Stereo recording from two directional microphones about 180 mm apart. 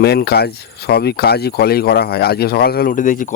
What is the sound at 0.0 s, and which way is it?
Speech, 65° left (ahead or behind).